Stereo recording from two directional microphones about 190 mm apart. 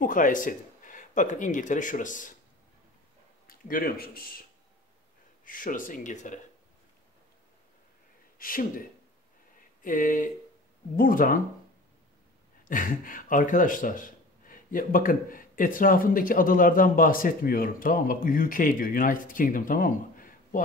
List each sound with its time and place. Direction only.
0.0 s speech: 45° left (ahead or behind)
3.4 s speech: 50° left (ahead or behind)
8.4 s speech: 45° left (ahead or behind)
9.8 s speech: 45° left (ahead or behind)
12.6 s speech: 45° left (ahead or behind)